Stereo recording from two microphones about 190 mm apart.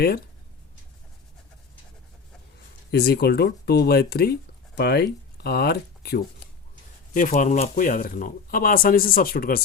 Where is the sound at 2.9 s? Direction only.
55° left (ahead or behind).